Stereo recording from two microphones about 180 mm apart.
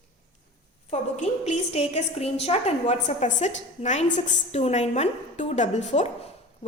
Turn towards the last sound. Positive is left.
turn(degrees=35)  # may be behind; listen again after turning